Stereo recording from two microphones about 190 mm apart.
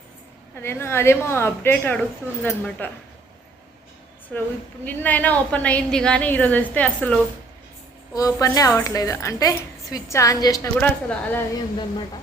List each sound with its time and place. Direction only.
0.5 s a woman's voice: 15° left (ahead or behind)
4.3 s a woman's voice: 5° left (ahead or behind)